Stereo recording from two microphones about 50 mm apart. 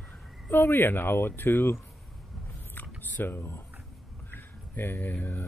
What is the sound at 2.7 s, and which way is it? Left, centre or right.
Typing, left.